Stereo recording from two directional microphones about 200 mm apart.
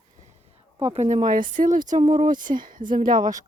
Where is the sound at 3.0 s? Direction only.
20° right (ahead or behind).